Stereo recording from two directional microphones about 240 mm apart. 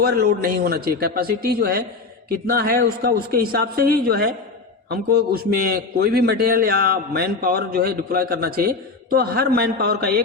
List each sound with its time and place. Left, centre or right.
0.0 s a man's voice: right